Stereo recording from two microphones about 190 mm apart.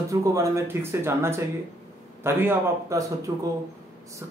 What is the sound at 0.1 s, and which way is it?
Speech, 15° right (ahead or behind).